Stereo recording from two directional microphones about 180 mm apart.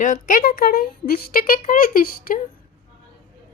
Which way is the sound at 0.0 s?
45° left (ahead or behind).